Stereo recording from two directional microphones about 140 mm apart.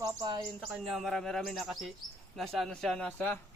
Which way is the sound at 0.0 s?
30° right (ahead or behind).